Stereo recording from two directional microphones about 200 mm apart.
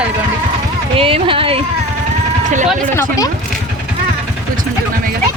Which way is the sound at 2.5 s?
40° right (ahead or behind).